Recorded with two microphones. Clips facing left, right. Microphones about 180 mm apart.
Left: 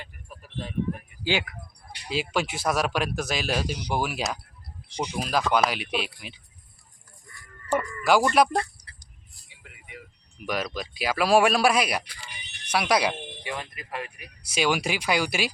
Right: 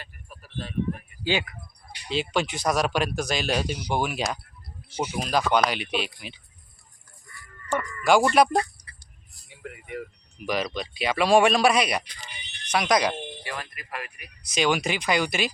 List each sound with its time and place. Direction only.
0.0 s speech: 15° left (ahead or behind)
2.0 s speech: 5° left (ahead or behind)
7.7 s chicken: 5° left (ahead or behind)
8.3 s speech: centre (ahead or behind)
9.5 s vehicle: 50° right (ahead or behind)
10.4 s speech: centre (ahead or behind); by 14.3 s 25° left (ahead or behind)
14.4 s speech: 10° left (ahead or behind)